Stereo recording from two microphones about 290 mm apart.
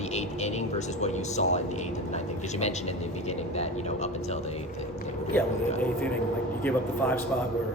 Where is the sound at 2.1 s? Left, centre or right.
Left.